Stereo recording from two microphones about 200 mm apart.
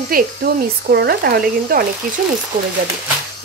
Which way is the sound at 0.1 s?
50° right (ahead or behind).